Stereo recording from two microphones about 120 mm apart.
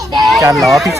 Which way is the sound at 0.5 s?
Centre (ahead or behind).